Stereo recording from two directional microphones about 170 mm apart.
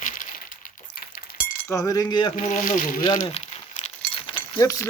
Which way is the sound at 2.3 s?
50° left (ahead or behind).